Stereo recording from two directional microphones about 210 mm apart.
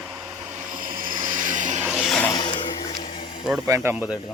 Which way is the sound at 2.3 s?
20° left (ahead or behind).